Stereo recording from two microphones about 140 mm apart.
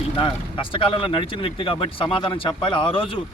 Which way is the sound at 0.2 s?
40° left (ahead or behind).